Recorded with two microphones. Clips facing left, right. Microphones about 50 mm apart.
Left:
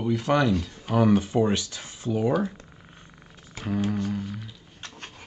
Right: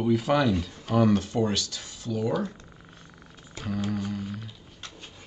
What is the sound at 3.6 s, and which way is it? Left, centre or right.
Mantra, centre.